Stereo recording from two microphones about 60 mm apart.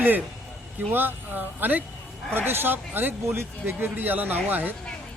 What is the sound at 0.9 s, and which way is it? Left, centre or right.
Speech, right.